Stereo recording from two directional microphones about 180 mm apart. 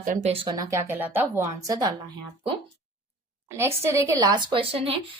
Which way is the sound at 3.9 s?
15° right (ahead or behind).